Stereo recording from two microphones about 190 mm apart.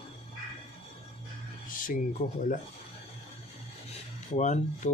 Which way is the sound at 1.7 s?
45° left (ahead or behind).